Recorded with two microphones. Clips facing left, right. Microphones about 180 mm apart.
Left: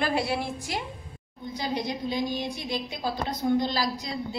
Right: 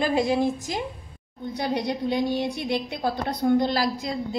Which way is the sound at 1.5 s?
65° right (ahead or behind).